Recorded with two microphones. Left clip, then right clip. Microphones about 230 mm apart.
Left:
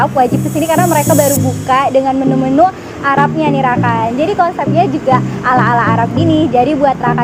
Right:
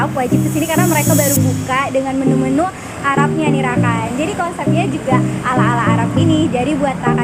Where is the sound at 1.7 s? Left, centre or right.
Centre.